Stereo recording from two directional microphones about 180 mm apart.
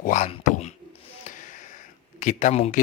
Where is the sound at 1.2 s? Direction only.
45° left (ahead or behind).